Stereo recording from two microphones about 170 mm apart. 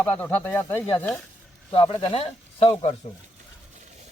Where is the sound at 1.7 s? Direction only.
25° left (ahead or behind).